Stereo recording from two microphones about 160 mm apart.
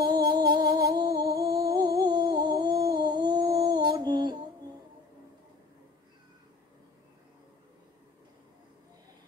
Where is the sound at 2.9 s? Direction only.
25° right (ahead or behind).